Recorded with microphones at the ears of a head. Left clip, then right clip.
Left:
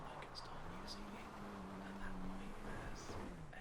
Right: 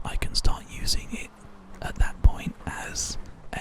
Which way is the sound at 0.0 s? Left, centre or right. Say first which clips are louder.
Right 19 dB; right.